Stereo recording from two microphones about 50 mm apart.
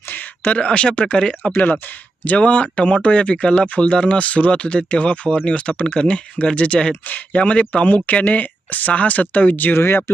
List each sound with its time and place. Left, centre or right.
0.1 s speech: left
2.2 s speech: left
9.7 s speech: left